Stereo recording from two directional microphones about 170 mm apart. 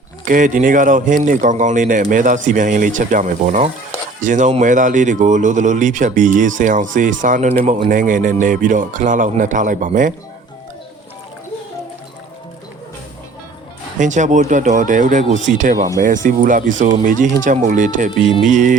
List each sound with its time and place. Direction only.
0.3 s speech: 50° right (ahead or behind)
14.0 s speech: 45° right (ahead or behind)